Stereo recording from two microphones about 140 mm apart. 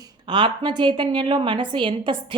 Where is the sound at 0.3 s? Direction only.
35° right (ahead or behind).